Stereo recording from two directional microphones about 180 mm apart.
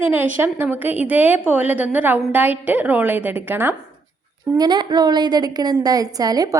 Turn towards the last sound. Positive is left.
turn(degrees=-20)  # may be behind; listen again after turning